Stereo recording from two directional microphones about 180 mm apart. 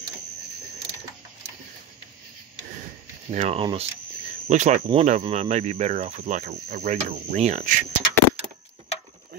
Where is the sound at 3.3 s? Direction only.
35° right (ahead or behind).